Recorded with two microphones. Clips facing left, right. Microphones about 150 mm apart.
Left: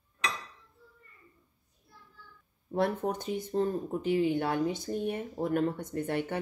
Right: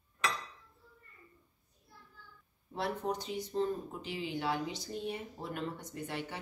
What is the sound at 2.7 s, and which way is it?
Speech, 55° left (ahead or behind).